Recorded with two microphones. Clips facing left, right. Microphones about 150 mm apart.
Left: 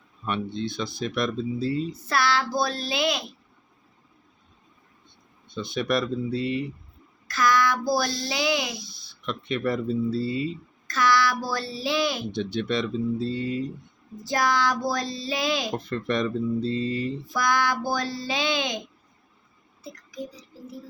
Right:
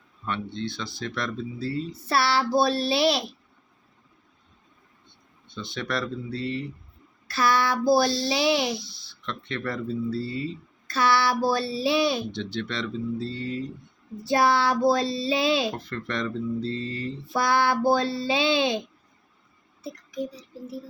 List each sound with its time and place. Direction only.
0.3 s speech: 15° left (ahead or behind)
1.9 s child singing: 30° right (ahead or behind)
5.5 s speech: 15° left (ahead or behind)
7.3 s child singing: 30° right (ahead or behind)
8.7 s speech: 15° left (ahead or behind)
10.8 s child singing: 30° right (ahead or behind)
12.3 s speech: 15° left (ahead or behind)
14.3 s child singing: 30° right (ahead or behind)
15.7 s speech: 15° left (ahead or behind)
17.3 s child singing: 30° right (ahead or behind)
19.8 s speech: 25° right (ahead or behind)